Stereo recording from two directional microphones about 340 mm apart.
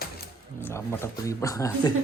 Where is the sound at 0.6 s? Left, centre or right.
Centre.